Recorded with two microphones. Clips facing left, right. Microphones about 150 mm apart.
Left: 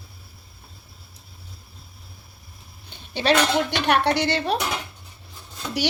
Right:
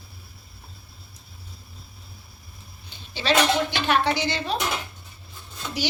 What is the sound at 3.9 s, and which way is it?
Speech, 65° left (ahead or behind).